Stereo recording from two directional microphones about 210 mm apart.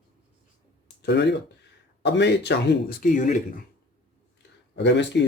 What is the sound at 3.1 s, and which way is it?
Speech, 40° left (ahead or behind).